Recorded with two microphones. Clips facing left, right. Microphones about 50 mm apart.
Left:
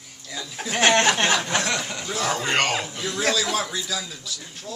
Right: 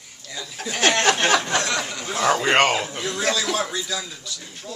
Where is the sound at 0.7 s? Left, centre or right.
Centre.